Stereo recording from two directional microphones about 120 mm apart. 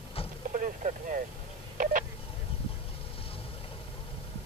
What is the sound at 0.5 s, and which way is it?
Vehicle, 90° right.